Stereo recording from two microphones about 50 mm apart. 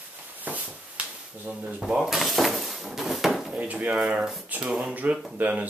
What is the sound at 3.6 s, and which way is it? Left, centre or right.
Speech, right.